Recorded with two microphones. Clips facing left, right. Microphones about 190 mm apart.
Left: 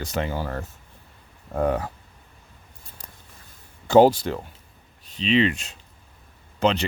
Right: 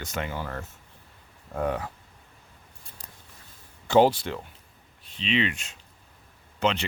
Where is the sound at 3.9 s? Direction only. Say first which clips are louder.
Left 5 dB; 40° left (ahead or behind).